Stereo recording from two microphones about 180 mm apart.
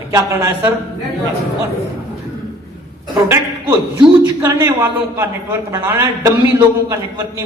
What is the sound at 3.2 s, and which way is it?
A man's voice, 15° right (ahead or behind).